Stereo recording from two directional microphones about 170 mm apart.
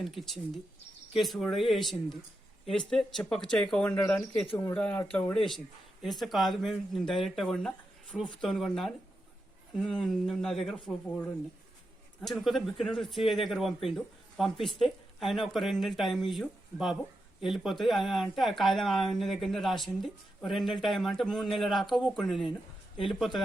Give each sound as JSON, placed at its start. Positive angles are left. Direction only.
{"t": 0.0, "sound": "speech", "side_deg": 0}